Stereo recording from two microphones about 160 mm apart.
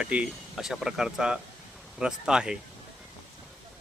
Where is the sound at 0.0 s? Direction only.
5° right (ahead or behind).